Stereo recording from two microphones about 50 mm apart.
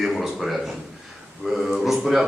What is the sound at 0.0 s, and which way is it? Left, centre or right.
A man's voice, centre.